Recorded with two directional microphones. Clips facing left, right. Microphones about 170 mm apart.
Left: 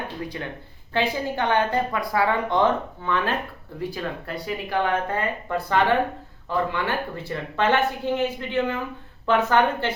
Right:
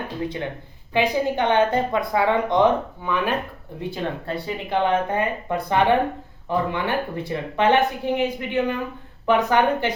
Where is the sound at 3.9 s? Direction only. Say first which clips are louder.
Right 3 dB; 25° right (ahead or behind).